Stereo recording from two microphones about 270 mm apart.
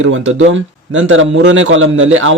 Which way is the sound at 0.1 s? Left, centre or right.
Right.